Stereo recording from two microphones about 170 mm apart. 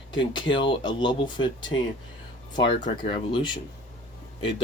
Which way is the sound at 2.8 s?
30° left (ahead or behind).